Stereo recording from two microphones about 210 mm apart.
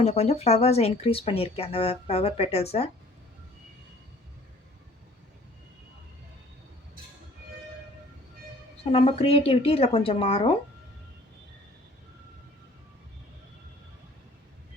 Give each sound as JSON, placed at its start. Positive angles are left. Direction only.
{"t": 0.0, "sound": "speech", "side_deg": 30}
{"t": 8.8, "sound": "speech", "side_deg": 25}